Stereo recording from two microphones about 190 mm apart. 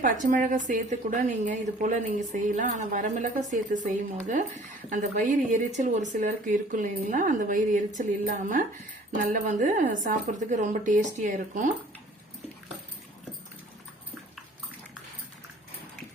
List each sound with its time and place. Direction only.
0.0 s a woman's voice: 45° right (ahead or behind)